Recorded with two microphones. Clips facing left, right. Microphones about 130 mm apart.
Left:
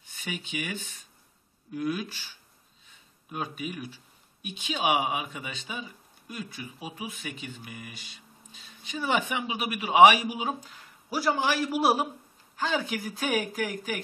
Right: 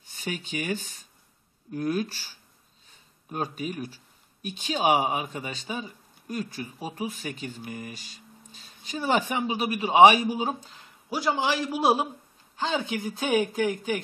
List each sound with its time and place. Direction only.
0.5 s speech: 40° right (ahead or behind)
3.3 s a man's voice: 40° right (ahead or behind)